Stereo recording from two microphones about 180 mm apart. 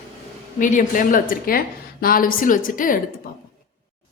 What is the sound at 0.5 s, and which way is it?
A woman's voice, 45° left (ahead or behind).